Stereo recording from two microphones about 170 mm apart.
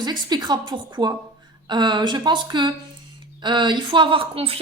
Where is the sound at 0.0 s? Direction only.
25° right (ahead or behind).